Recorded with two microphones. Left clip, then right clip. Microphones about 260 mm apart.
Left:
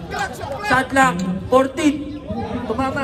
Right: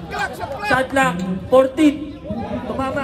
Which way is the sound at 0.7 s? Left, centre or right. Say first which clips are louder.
Left 2 dB; left.